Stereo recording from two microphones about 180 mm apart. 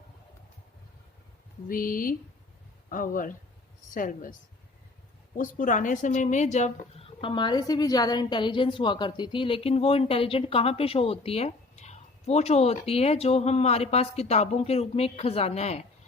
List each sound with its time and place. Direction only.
1.6 s speech: 50° left (ahead or behind)
5.4 s speech: 45° left (ahead or behind)